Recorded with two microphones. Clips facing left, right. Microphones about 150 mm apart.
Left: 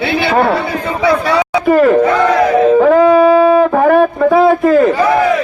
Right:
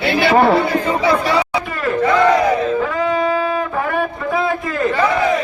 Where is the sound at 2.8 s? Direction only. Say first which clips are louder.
Left 11 dB; 80° left.